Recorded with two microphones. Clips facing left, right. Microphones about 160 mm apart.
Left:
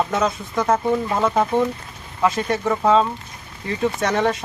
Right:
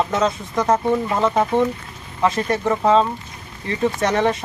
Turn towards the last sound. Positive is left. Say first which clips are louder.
# right 1 dB
turn(degrees=0)  # may be behind; listen again after turning